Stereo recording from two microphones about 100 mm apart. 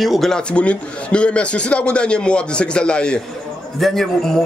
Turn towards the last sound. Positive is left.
turn(degrees=5)  # may be behind; listen again after turning